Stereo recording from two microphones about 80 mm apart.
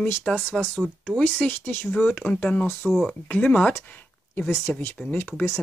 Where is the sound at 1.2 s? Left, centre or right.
Left.